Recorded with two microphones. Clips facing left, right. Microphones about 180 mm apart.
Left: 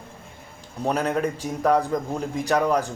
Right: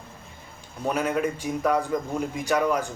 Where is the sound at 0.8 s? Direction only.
35° left (ahead or behind).